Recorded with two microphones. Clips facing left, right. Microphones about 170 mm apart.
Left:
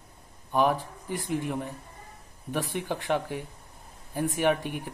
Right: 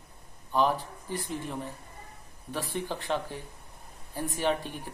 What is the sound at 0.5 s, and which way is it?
Speech, 15° left (ahead or behind).